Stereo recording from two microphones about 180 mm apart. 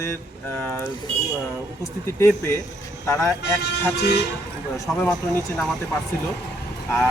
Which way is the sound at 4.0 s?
65° left (ahead or behind).